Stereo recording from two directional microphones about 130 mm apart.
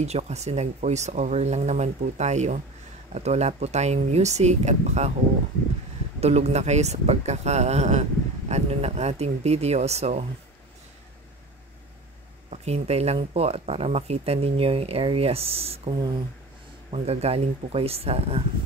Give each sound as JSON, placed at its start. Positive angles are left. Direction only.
{"t": 0.0, "sound": "speech", "side_deg": -55}
{"t": 6.2, "sound": "speech", "side_deg": -55}
{"t": 12.4, "sound": "speech", "side_deg": -55}